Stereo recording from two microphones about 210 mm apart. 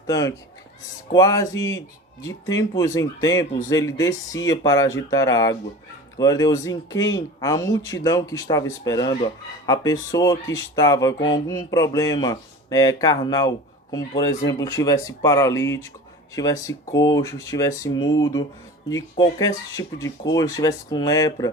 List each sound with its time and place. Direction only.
0.1 s speech: 15° left (ahead or behind)